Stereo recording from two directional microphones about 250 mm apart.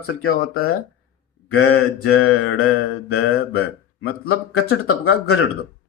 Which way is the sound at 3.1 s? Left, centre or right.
Left.